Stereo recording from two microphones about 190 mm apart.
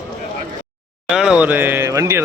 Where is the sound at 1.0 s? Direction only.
Centre (ahead or behind).